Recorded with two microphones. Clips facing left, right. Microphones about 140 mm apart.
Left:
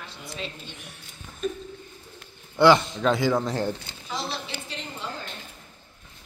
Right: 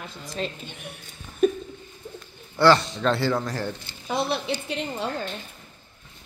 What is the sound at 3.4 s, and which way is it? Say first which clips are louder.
Speech: left 3 dB; 25° left (ahead or behind).